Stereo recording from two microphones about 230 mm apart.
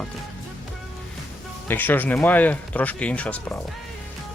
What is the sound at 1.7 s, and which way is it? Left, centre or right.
Speech, centre.